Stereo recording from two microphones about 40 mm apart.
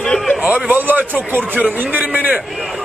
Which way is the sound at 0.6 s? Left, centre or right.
Right.